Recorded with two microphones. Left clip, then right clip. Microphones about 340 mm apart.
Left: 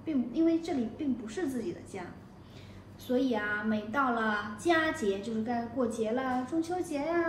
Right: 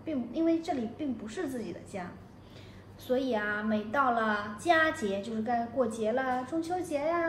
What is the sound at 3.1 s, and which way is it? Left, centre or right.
A woman's voice, right.